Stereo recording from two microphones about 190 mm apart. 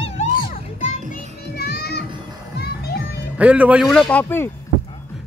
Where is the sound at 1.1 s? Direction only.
55° left (ahead or behind).